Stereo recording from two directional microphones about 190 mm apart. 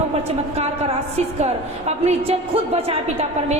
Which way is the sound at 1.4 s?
35° right (ahead or behind).